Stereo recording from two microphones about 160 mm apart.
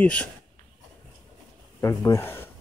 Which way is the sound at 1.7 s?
15° left (ahead or behind).